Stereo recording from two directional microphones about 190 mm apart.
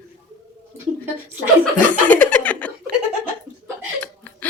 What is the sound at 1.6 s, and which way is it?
Speech, 10° left (ahead or behind).